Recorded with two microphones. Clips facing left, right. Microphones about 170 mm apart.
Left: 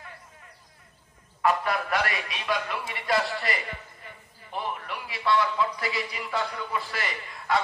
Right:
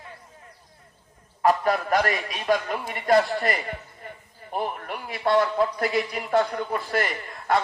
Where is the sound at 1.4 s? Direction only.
40° right (ahead or behind).